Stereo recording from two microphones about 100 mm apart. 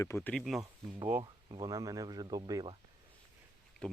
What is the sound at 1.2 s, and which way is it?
Speech, 50° right (ahead or behind).